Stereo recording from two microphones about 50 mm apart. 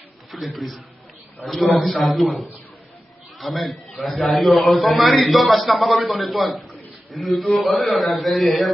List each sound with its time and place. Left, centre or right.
0.3 s a man's voice: centre